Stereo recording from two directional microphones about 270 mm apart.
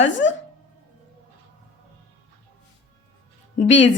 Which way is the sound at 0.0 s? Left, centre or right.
Left.